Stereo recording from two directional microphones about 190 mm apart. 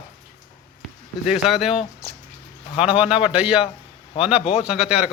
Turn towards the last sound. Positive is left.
turn(degrees=-5)  # may be behind; listen again after turning